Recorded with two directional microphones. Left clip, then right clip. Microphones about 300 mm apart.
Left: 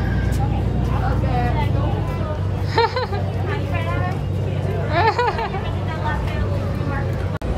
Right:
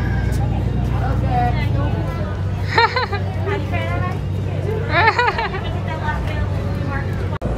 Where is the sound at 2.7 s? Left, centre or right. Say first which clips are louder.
Right 3 dB; centre.